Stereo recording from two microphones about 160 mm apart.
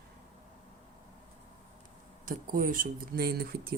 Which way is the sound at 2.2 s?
60° right (ahead or behind).